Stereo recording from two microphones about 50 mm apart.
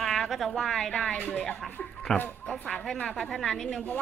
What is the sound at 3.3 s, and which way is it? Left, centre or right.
Speech, centre.